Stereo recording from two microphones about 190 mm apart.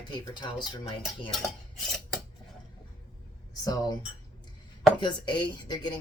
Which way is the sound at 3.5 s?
20° left (ahead or behind).